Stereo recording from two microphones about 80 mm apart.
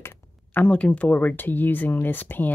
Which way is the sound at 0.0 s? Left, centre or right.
Left.